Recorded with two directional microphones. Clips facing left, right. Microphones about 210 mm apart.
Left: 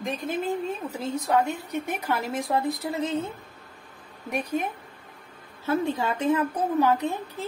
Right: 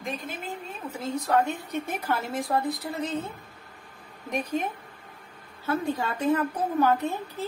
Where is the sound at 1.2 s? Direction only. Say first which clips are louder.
Even; 15° left (ahead or behind).